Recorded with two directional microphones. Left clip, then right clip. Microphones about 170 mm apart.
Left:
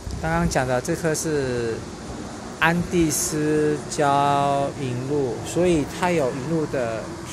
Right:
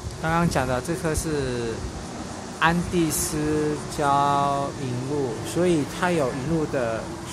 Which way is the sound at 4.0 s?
10° left (ahead or behind).